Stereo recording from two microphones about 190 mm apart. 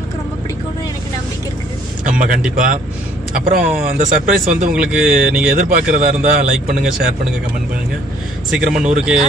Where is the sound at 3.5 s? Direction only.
45° right (ahead or behind).